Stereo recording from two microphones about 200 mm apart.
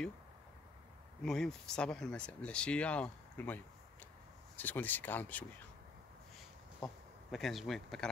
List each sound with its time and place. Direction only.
1.2 s speech: centre (ahead or behind)
7.2 s speech: centre (ahead or behind)